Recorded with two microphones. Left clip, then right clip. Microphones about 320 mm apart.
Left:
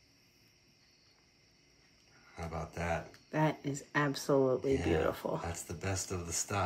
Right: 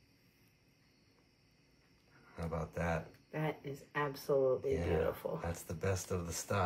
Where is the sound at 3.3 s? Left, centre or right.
Left.